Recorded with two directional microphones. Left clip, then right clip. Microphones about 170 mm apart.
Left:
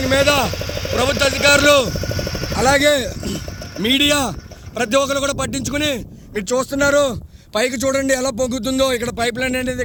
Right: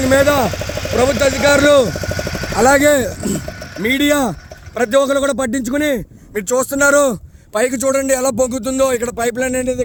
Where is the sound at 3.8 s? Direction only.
60° right (ahead or behind).